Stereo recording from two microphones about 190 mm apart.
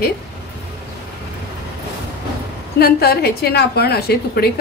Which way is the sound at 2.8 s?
55° left (ahead or behind).